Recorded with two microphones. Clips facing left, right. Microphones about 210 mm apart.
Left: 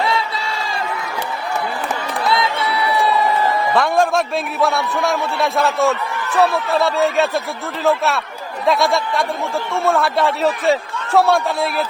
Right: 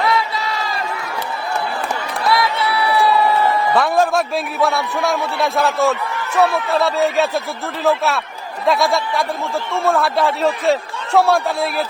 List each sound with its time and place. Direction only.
0.0 s crowd: 25° left (ahead or behind)
2.3 s a sound: 25° left (ahead or behind)
3.8 s a man's voice: centre (ahead or behind)